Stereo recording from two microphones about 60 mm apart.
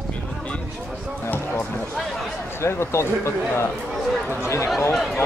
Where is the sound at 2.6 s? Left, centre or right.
Left.